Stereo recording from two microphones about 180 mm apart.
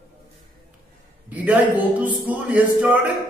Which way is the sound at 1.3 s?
10° right (ahead or behind).